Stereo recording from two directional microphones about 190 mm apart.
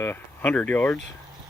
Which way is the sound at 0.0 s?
10° left (ahead or behind).